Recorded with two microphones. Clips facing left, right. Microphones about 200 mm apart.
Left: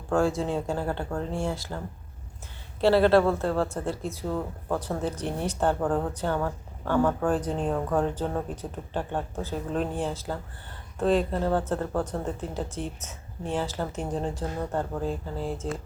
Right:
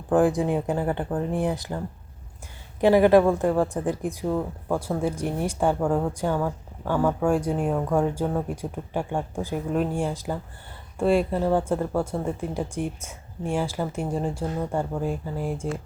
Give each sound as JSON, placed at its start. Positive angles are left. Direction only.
{"t": 0.1, "sound": "speech", "side_deg": -15}
{"t": 2.8, "sound": "speech", "side_deg": -15}